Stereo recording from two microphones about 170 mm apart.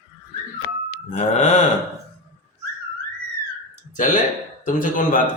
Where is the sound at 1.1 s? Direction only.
45° left (ahead or behind).